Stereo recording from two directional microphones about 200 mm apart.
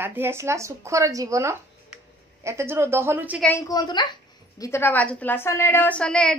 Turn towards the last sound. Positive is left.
turn(degrees=5)  # may be behind; listen again after turning